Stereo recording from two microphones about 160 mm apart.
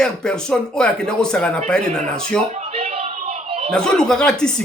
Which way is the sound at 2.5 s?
40° right (ahead or behind).